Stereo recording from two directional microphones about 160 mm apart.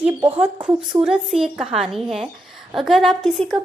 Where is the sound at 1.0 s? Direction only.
5° right (ahead or behind).